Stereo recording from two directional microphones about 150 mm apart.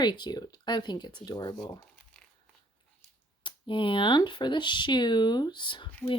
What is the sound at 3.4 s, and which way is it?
Speech, 35° left (ahead or behind).